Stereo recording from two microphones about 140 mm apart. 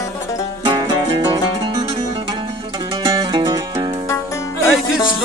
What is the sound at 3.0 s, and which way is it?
Music, 35° right (ahead or behind).